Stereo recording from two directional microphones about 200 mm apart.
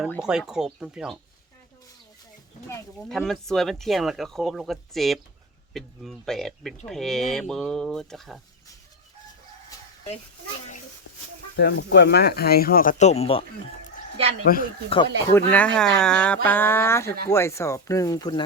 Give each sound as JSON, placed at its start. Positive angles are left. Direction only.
{"t": 0.2, "sound": "speech", "side_deg": -5}
{"t": 3.1, "sound": "speech", "side_deg": 0}
{"t": 11.5, "sound": "speech", "side_deg": 60}
{"t": 14.4, "sound": "speech", "side_deg": 45}
{"t": 15.3, "sound": "speech", "side_deg": 10}